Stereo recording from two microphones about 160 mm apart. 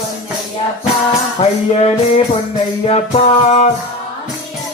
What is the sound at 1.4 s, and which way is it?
Music, 40° left (ahead or behind).